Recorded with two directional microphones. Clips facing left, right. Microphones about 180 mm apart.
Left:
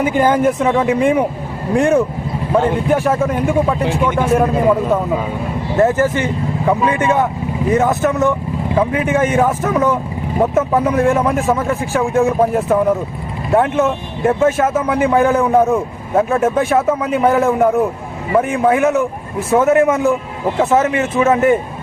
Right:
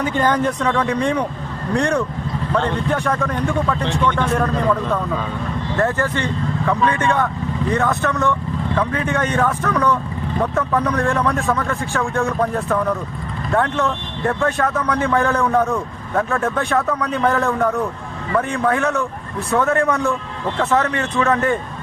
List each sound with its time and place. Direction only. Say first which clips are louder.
0.0 s a man's voice: left 5 dB; 10° left (ahead or behind)
2.5 s a man's voice: left 6 dB; 10° left (ahead or behind)
3.1 s a man's voice: left 5 dB; 20° left (ahead or behind)